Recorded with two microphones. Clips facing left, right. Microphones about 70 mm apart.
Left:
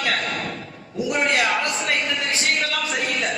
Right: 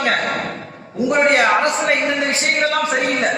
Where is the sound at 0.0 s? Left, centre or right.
Right.